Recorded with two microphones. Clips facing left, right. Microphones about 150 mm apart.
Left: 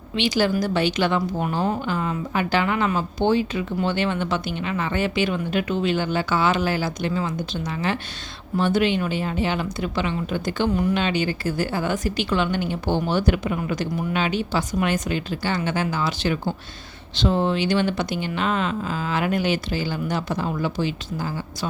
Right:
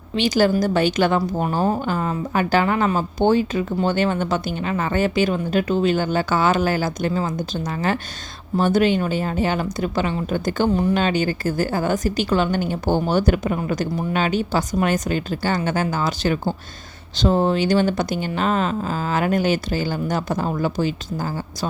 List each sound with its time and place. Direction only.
0.2 s a woman's voice: 45° right (ahead or behind)
10.7 s a woman's voice: 30° right (ahead or behind)